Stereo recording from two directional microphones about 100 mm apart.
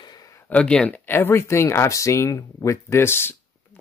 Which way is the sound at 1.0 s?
20° left (ahead or behind).